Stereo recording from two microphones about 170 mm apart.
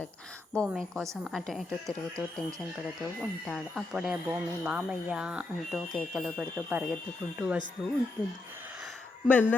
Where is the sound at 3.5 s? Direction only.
Centre (ahead or behind).